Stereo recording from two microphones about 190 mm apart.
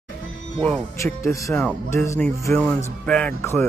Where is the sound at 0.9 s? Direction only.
15° left (ahead or behind).